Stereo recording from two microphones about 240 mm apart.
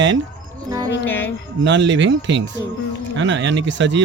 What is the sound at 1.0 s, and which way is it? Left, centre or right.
Speech, centre.